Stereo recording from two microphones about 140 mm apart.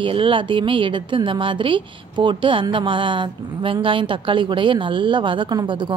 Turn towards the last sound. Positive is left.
turn(degrees=-35)  # may be behind; listen again after turning